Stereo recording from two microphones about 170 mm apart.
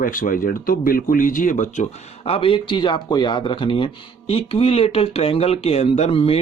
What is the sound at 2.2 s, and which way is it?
Speech, 35° left (ahead or behind).